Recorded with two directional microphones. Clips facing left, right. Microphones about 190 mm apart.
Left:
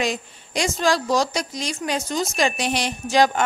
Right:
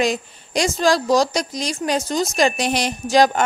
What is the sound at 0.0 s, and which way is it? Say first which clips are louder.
Speech: right 4 dB; 40° right (ahead or behind).